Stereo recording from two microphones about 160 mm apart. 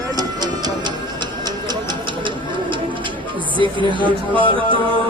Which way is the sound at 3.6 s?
30° right (ahead or behind).